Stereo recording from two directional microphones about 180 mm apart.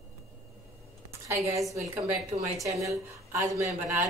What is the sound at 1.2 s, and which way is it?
Speech, 15° right (ahead or behind).